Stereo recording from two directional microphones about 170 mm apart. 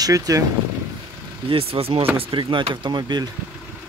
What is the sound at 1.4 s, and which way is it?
Speech, 35° right (ahead or behind).